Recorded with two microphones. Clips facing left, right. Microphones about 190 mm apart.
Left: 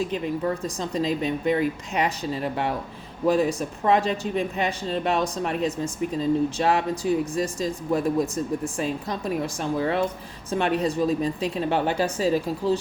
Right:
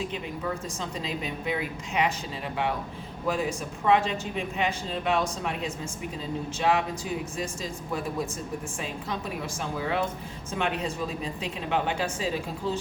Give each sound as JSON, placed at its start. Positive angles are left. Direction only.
{"t": 0.8, "sound": "speech", "side_deg": 40}